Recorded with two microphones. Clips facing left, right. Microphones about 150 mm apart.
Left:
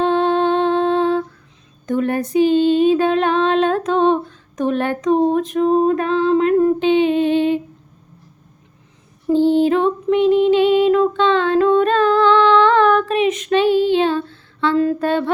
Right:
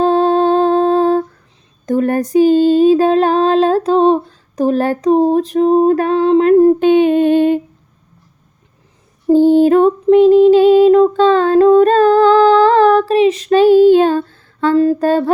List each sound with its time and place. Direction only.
0.0 s humming: 35° right (ahead or behind)
1.9 s female singing: 40° right (ahead or behind)
6.7 s a sound: 50° right (ahead or behind)
9.3 s female singing: 45° right (ahead or behind)